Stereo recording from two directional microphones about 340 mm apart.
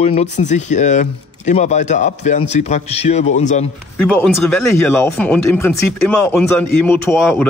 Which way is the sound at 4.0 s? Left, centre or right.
Centre.